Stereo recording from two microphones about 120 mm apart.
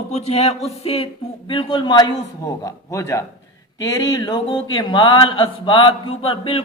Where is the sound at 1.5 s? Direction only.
45° left (ahead or behind).